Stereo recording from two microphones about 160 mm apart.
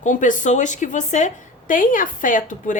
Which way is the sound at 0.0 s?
50° left (ahead or behind).